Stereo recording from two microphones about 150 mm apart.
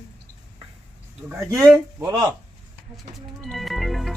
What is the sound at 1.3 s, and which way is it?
Speech, 20° right (ahead or behind).